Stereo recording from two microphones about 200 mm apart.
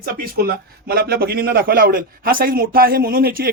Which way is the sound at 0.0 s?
50° right (ahead or behind).